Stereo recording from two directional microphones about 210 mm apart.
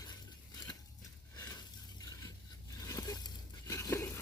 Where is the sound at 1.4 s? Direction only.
20° left (ahead or behind).